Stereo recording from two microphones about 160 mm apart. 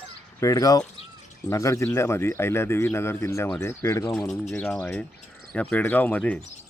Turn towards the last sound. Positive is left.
turn(degrees=10)  # may be behind; listen again after turning